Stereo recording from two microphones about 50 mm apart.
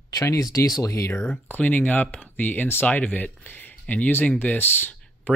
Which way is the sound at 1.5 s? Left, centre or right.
Left.